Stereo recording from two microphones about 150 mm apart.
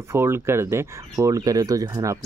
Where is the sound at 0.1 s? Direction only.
15° right (ahead or behind).